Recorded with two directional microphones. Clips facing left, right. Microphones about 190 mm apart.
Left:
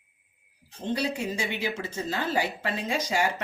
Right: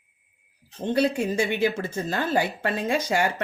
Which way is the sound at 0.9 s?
55° right (ahead or behind).